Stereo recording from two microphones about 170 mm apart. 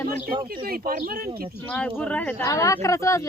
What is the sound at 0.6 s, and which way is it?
Speech, 60° right (ahead or behind).